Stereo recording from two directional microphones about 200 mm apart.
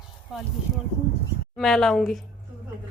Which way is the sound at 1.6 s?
Centre (ahead or behind).